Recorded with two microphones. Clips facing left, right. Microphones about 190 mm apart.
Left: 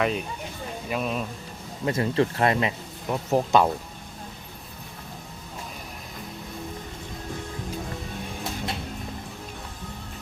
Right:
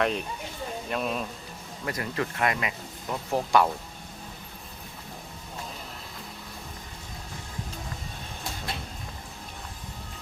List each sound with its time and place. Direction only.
0.0 s speech: 5° left (ahead or behind)
1.8 s speech: 25° left (ahead or behind)
3.1 s speech: 20° left (ahead or behind)